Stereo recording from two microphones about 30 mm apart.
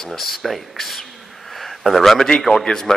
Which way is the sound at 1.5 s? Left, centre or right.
Centre.